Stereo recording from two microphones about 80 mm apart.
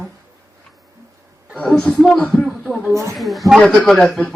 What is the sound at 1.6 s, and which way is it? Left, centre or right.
A man's voice, centre.